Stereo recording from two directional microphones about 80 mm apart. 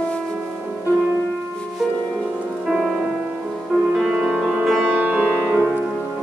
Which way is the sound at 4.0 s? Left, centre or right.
Centre.